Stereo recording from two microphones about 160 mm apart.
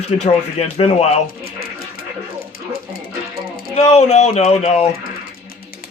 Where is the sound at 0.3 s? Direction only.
40° left (ahead or behind).